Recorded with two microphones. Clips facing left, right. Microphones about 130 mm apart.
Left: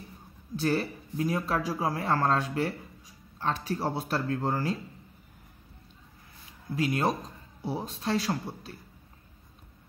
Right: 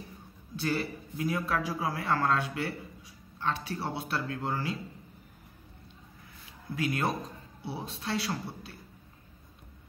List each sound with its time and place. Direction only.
0.6 s a man's voice: 35° left (ahead or behind)
6.7 s a man's voice: 30° left (ahead or behind)
7.6 s a man's voice: 40° left (ahead or behind)